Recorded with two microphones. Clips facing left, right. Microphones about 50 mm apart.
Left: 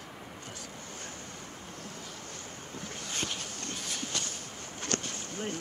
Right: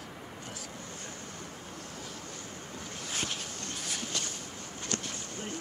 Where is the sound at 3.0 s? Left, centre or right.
Centre.